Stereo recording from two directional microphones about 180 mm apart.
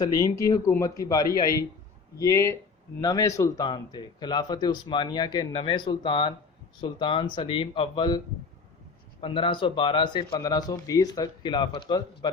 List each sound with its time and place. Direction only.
0.0 s speech: 20° left (ahead or behind)
9.2 s speech: 30° left (ahead or behind)